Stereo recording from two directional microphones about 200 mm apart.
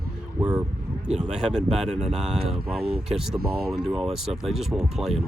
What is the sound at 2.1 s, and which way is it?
Speech, centre (ahead or behind).